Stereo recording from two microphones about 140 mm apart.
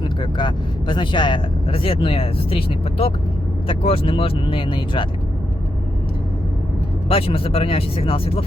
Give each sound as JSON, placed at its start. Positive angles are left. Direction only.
{"t": 0.2, "sound": "speech", "side_deg": 35}
{"t": 7.1, "sound": "speech", "side_deg": 45}